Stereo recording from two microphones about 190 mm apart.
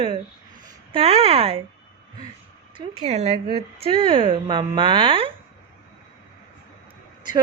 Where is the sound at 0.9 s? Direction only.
30° right (ahead or behind).